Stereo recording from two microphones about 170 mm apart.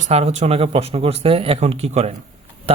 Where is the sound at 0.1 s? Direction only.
40° right (ahead or behind).